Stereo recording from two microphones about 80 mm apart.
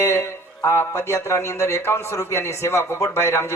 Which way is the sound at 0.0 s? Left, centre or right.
Left.